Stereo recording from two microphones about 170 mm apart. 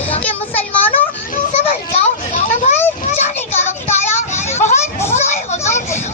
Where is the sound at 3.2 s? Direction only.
40° left (ahead or behind).